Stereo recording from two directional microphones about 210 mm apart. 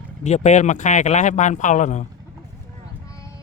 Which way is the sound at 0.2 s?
35° left (ahead or behind).